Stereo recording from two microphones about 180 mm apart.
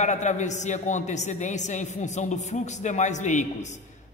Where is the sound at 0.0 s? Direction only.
40° left (ahead or behind).